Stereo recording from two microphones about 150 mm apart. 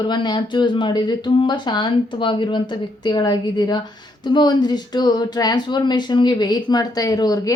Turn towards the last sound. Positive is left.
turn(degrees=25)  # may be behind; listen again after turning